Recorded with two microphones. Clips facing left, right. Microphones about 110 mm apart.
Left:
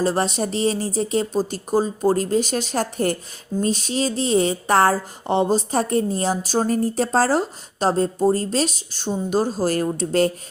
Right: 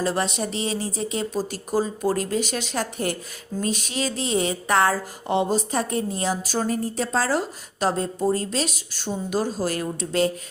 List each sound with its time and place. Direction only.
0.0 s speech: 35° left (ahead or behind)